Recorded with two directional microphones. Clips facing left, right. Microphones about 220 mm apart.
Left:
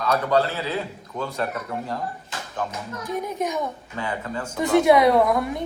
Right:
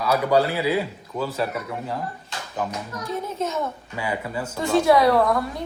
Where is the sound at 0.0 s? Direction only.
10° right (ahead or behind).